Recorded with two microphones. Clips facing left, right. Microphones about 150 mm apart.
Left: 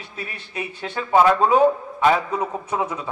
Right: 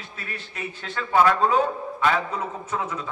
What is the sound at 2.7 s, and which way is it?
Speech, 15° left (ahead or behind).